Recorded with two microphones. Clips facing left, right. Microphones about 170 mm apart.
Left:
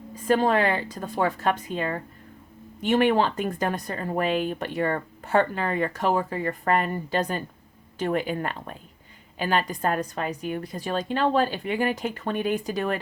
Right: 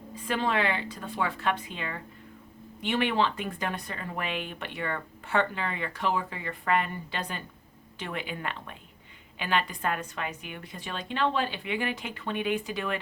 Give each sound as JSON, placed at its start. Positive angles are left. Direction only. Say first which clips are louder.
{"t": 0.1, "sound": "a woman's voice", "louder": "left 7 dB", "side_deg": 40}